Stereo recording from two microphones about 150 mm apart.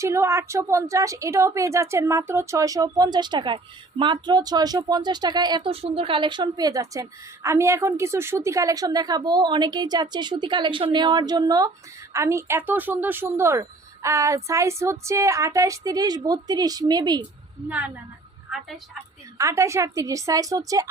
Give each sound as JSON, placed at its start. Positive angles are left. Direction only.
{"t": 0.0, "sound": "a woman's voice", "side_deg": -20}
{"t": 19.4, "sound": "a woman's voice", "side_deg": -20}